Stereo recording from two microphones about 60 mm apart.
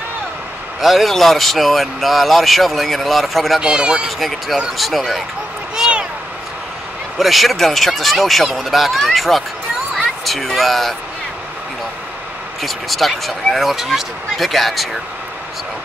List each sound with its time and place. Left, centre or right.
0.7 s speech: centre
3.6 s speech: centre
4.7 s speech: centre
5.8 s a sound: centre
7.2 s speech: centre
10.2 s a sound: centre
12.6 s speech: centre